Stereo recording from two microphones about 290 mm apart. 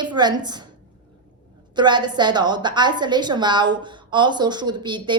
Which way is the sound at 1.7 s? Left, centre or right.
Centre.